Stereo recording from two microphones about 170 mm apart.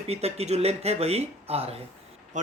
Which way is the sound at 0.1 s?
40° right (ahead or behind).